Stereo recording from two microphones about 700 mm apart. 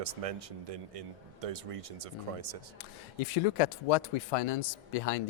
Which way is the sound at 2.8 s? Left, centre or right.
Left.